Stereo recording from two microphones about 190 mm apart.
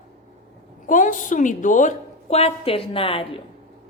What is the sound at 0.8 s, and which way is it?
A woman's voice, 45° left (ahead or behind).